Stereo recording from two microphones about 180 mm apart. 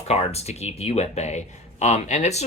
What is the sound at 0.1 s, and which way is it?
Speech, 35° left (ahead or behind).